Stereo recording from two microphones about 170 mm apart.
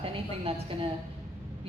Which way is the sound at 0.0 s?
35° right (ahead or behind).